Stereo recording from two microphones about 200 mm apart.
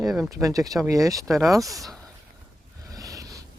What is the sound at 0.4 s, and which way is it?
Speech, 15° right (ahead or behind).